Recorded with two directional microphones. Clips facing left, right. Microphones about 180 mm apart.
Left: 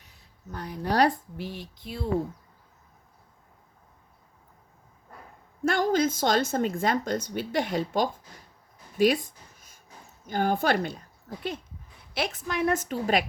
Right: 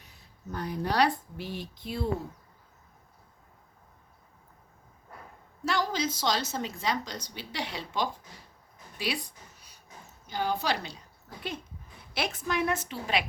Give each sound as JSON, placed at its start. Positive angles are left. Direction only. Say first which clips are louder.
{"t": 0.5, "sound": "a woman's voice", "louder": "left 2 dB", "side_deg": 45}
{"t": 5.6, "sound": "a woman's voice", "louder": "left 6 dB", "side_deg": 50}
{"t": 9.0, "sound": "a sound", "louder": "left 12 dB", "side_deg": 45}
{"t": 10.2, "sound": "a woman's voice", "louder": "left 5 dB", "side_deg": 50}
{"t": 12.1, "sound": "a woman's voice", "louder": "left 1 dB", "side_deg": 40}